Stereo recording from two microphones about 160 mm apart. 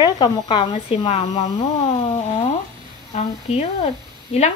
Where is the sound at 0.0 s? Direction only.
30° left (ahead or behind).